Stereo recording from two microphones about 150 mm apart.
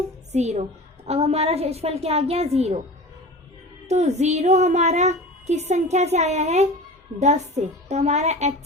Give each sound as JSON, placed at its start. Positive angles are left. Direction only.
{"t": 0.3, "sound": "a woman's voice", "side_deg": -50}
{"t": 3.8, "sound": "a woman's voice", "side_deg": -45}